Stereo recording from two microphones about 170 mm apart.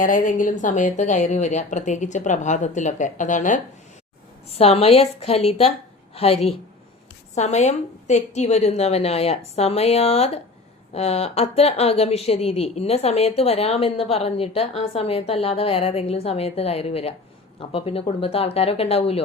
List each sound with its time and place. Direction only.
0.0 s a woman's voice: 50° left (ahead or behind)
4.4 s a woman's voice: 35° left (ahead or behind)